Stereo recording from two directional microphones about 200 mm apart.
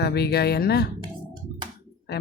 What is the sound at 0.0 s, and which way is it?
Speech, 55° left (ahead or behind).